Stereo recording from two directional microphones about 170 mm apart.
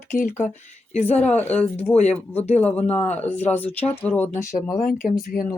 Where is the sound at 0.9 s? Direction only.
40° left (ahead or behind).